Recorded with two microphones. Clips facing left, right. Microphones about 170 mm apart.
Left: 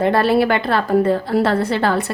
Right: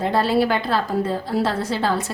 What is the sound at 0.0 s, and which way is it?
A woman's voice, 60° left (ahead or behind).